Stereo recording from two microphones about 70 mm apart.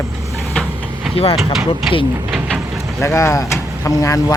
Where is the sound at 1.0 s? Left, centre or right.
Centre.